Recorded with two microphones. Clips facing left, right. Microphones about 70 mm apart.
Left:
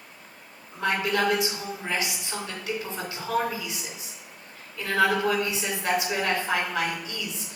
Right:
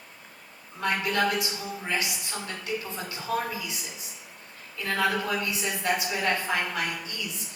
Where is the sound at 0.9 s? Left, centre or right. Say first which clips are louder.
Left 2 dB; left.